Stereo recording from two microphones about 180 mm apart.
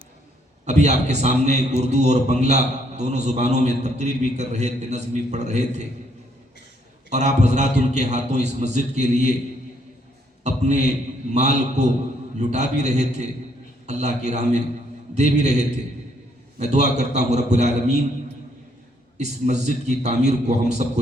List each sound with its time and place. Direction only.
0.6 s a man's voice: 40° right (ahead or behind)
7.1 s a man's voice: 40° right (ahead or behind)
10.4 s a man's voice: 40° right (ahead or behind)
19.1 s a man's voice: 40° right (ahead or behind)